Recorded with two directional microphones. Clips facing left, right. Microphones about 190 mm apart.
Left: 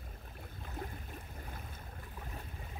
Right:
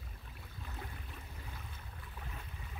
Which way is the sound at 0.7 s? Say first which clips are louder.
Left 6 dB; 45° left (ahead or behind).